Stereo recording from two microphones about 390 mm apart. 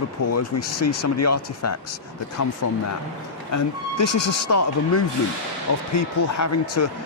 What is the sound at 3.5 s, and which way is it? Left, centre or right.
Speech, left.